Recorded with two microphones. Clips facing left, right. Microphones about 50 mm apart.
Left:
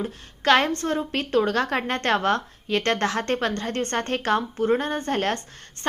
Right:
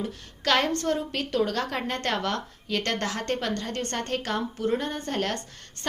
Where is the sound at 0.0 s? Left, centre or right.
Left.